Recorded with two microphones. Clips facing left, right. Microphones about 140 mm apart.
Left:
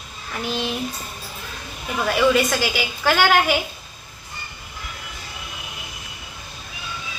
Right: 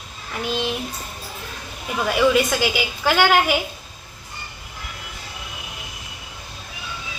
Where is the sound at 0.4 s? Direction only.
15° right (ahead or behind).